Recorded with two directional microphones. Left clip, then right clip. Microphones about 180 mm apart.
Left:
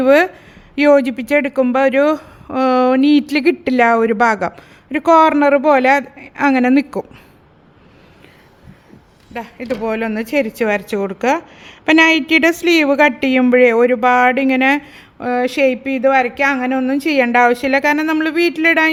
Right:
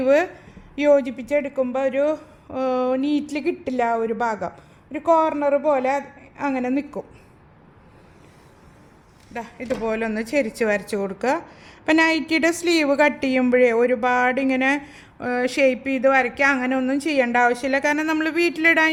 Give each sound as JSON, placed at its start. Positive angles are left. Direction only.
{"t": 0.0, "sound": "a woman's voice", "side_deg": 35}
{"t": 9.3, "sound": "a woman's voice", "side_deg": 30}